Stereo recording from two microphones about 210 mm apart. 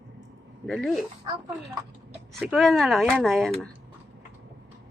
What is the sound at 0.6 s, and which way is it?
Speech, centre (ahead or behind).